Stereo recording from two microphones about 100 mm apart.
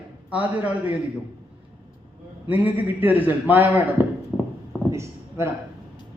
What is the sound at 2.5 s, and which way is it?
A man's voice, 20° right (ahead or behind).